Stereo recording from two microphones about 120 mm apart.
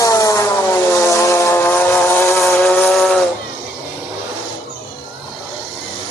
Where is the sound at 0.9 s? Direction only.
25° left (ahead or behind).